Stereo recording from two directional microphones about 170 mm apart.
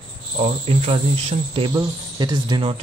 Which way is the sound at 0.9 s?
30° right (ahead or behind).